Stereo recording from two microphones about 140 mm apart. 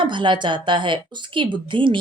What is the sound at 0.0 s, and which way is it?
A woman's voice, 35° right (ahead or behind).